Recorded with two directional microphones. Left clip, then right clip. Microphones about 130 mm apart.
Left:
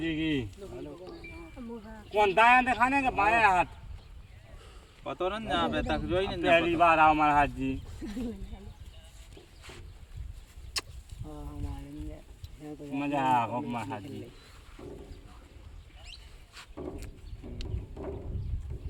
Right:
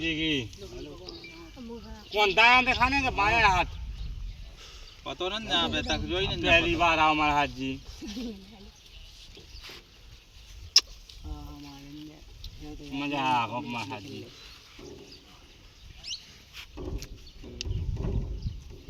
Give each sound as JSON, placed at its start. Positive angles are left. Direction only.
{"t": 0.0, "sound": "speech", "side_deg": 10}
{"t": 0.8, "sound": "music", "side_deg": 0}
{"t": 1.0, "sound": "music", "side_deg": 25}
{"t": 1.3, "sound": "a sound", "side_deg": -10}
{"t": 2.0, "sound": "speech", "side_deg": 15}
{"t": 5.0, "sound": "speech", "side_deg": 5}
{"t": 5.8, "sound": "speech", "side_deg": 0}
{"t": 12.6, "sound": "speech", "side_deg": 15}
{"t": 17.6, "sound": "a sound", "side_deg": -10}